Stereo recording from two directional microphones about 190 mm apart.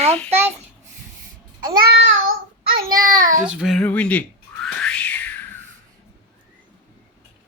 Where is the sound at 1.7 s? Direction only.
55° right (ahead or behind).